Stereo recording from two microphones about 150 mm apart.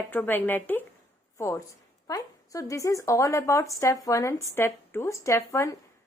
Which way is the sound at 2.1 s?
20° left (ahead or behind).